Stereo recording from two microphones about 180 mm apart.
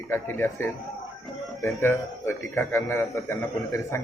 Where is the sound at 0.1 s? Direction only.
10° left (ahead or behind).